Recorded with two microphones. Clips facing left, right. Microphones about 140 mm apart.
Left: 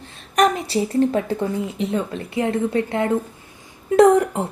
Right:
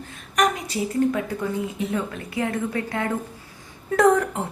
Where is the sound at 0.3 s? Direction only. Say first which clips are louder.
Left 5 dB; 30° left (ahead or behind).